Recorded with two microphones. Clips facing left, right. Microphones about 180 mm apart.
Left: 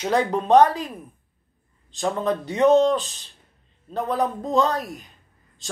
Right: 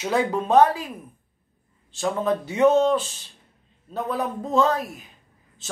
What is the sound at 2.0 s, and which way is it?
Speech, 5° right (ahead or behind).